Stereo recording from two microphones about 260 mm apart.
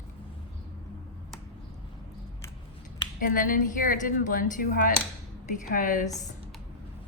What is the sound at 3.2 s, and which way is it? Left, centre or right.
Speech, left.